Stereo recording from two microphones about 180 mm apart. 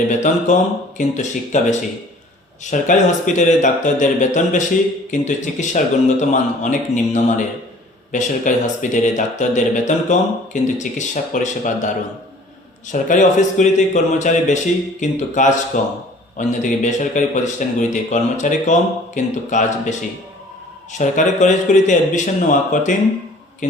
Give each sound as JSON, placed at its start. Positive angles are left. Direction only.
{"t": 0.1, "sound": "speech", "side_deg": 45}
{"t": 12.9, "sound": "speech", "side_deg": 45}